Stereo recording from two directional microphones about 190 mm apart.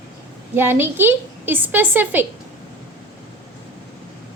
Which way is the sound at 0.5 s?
10° right (ahead or behind).